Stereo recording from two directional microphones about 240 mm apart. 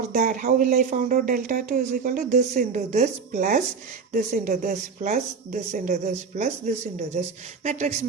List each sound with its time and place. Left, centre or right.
0.1 s speech: right